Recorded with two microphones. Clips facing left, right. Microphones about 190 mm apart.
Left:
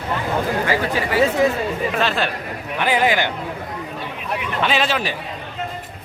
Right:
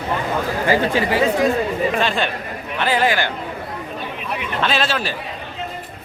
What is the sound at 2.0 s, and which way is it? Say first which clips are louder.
Speech: even; centre (ahead or behind).